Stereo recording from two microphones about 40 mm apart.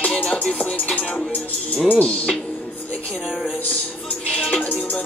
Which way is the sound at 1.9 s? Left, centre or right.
Left.